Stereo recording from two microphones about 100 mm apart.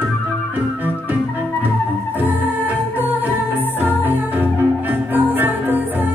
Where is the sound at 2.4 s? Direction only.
20° right (ahead or behind).